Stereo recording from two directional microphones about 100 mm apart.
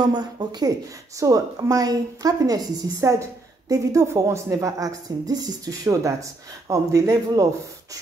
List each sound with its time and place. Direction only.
0.0 s a woman's voice: 45° right (ahead or behind)